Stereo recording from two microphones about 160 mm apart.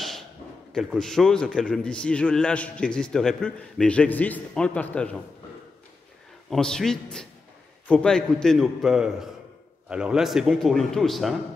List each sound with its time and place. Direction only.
0.7 s a man's voice: 5° left (ahead or behind)
6.5 s a man's voice: centre (ahead or behind)